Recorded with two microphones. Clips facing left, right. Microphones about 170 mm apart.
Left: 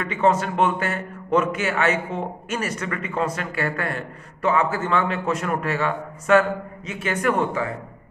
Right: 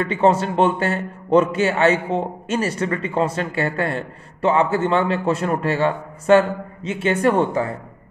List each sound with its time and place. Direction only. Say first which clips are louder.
0.0 s a man's voice: right 3 dB; 30° right (ahead or behind)